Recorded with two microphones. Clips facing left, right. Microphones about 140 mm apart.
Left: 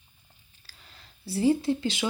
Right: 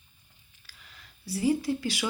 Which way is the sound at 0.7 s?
30° left (ahead or behind).